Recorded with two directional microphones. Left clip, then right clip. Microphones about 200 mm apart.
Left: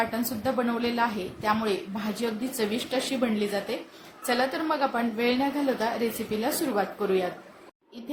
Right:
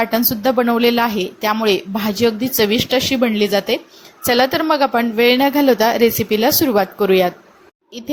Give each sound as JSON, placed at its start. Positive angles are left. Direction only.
{"t": 0.0, "sound": "speech", "side_deg": -40}